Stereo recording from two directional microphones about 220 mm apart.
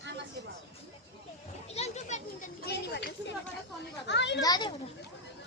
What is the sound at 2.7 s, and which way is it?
Speech, 50° left (ahead or behind).